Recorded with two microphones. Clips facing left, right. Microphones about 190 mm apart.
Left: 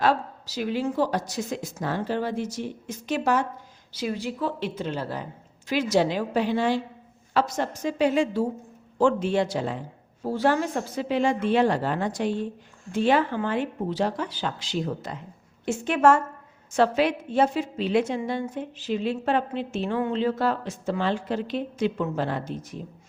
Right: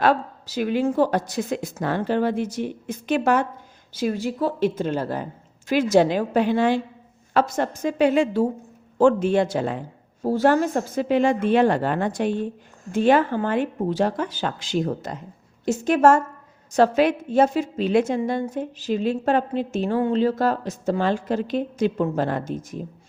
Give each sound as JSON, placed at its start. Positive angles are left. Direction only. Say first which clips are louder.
{"t": 0.0, "sound": "a woman's voice", "louder": "right 3 dB", "side_deg": -55}